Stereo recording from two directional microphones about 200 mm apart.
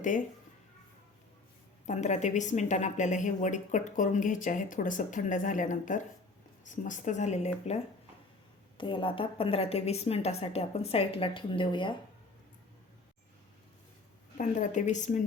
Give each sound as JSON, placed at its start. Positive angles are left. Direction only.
{"t": 1.9, "sound": "a woman's voice", "side_deg": 35}
{"t": 8.8, "sound": "a woman's voice", "side_deg": 25}
{"t": 14.3, "sound": "a woman's voice", "side_deg": 40}